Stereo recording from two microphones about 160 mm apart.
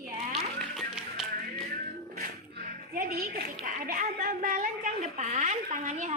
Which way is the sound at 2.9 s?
65° right (ahead or behind).